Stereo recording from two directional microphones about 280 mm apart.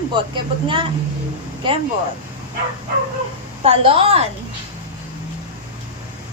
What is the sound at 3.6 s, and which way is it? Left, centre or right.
Speech, centre.